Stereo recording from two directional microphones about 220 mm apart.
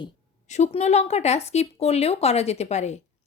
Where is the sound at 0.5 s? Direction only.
30° left (ahead or behind).